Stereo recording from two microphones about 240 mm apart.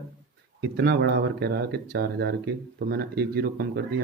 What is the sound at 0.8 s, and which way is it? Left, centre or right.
Speech, right.